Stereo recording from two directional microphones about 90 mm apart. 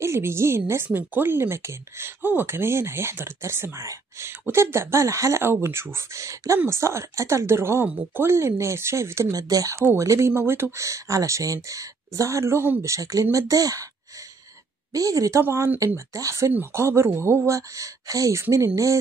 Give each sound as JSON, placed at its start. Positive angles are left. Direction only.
{"t": 0.0, "sound": "a woman's voice", "side_deg": -30}
{"t": 14.9, "sound": "a woman's voice", "side_deg": -40}
{"t": 17.5, "sound": "speech", "side_deg": -35}